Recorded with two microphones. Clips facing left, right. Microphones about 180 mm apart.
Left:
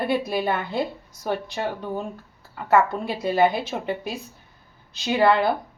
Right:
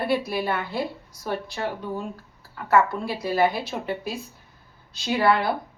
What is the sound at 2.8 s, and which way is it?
A woman's voice, 20° left (ahead or behind).